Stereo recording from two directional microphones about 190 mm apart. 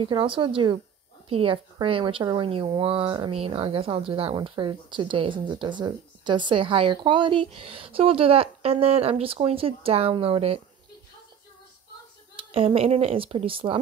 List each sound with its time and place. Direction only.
0.0 s speech: 25° right (ahead or behind)
12.4 s speech: 30° right (ahead or behind)